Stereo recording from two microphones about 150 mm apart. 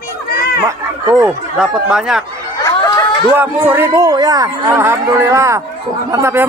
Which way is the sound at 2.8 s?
30° left (ahead or behind).